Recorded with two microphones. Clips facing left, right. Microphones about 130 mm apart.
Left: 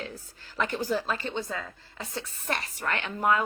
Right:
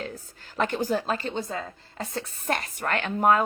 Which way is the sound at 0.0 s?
45° right (ahead or behind).